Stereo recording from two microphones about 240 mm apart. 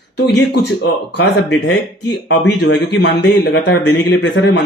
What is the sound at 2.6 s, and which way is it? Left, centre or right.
A man's voice, left.